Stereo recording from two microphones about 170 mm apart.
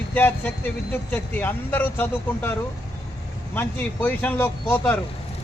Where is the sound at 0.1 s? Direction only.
10° left (ahead or behind).